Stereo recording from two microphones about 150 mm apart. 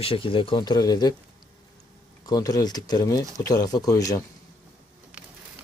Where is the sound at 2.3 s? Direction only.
25° left (ahead or behind).